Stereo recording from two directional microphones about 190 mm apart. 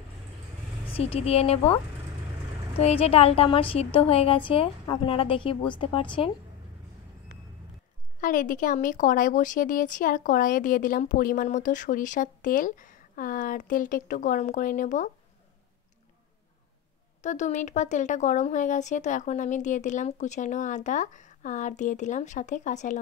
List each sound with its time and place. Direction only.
0.9 s speech: 30° left (ahead or behind)
2.8 s a woman's voice: 30° left (ahead or behind)
8.2 s speech: 45° left (ahead or behind)
17.2 s speech: 40° left (ahead or behind)